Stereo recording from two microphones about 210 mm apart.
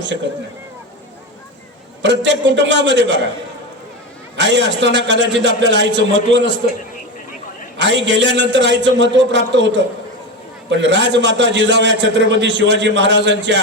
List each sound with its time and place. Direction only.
2.0 s a man's voice: 60° right (ahead or behind)
4.4 s a man's voice: 55° right (ahead or behind)
7.8 s a man's voice: 55° right (ahead or behind)